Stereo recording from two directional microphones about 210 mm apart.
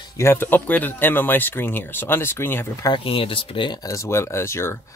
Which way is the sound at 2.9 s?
25° left (ahead or behind).